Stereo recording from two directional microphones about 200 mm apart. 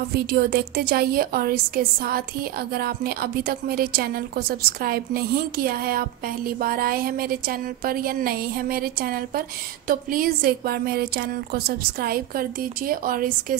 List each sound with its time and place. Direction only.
0.1 s a woman's voice: 50° right (ahead or behind)